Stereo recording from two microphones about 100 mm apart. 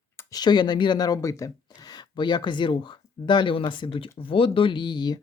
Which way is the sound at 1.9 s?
50° left (ahead or behind).